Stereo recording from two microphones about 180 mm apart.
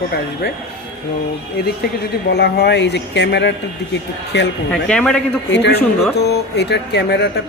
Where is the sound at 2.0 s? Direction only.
65° left (ahead or behind).